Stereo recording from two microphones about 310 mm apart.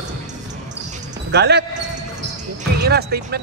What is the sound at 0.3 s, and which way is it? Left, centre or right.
Basketball bounce, right.